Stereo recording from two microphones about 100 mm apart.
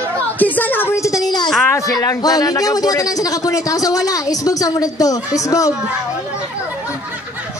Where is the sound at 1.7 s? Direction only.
35° left (ahead or behind).